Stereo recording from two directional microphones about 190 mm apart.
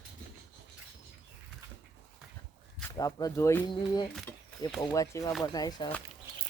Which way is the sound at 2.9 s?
20° left (ahead or behind).